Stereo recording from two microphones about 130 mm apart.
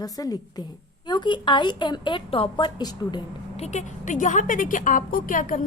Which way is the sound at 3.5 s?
60° left (ahead or behind).